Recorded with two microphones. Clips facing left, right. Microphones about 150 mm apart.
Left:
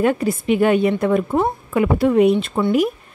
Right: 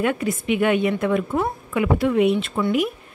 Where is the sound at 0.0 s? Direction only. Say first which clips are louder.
Left 4 dB; 35° left (ahead or behind).